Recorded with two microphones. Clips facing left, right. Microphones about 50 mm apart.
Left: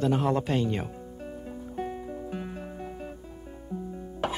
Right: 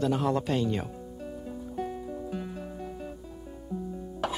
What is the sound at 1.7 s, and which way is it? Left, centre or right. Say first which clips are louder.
Music: left 1 dB; left.